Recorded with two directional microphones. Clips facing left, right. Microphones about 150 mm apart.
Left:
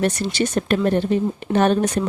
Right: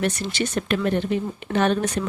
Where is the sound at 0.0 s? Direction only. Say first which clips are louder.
Left 4 dB; 35° left (ahead or behind).